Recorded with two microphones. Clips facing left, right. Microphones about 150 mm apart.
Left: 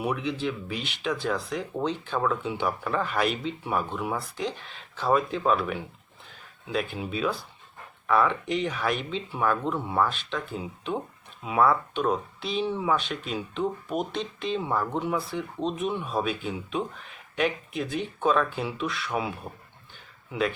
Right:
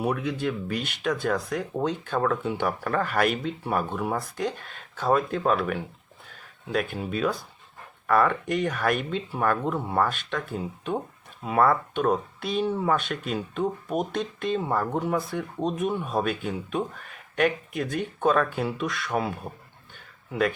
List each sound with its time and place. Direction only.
0.0 s speech: 45° right (ahead or behind)